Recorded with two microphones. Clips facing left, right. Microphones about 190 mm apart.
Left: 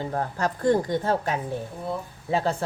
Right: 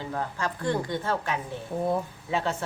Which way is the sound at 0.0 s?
45° left (ahead or behind).